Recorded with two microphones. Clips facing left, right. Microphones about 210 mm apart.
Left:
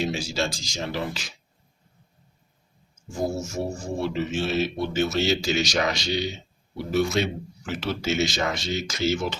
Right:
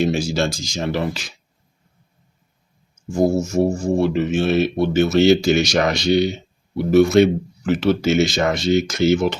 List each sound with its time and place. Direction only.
0.0 s speech: 55° right (ahead or behind)
3.2 s speech: 65° right (ahead or behind)